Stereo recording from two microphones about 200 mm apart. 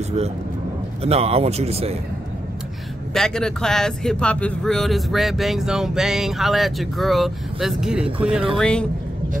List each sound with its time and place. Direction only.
1.0 s speech: 30° right (ahead or behind)
3.1 s speech: 5° left (ahead or behind)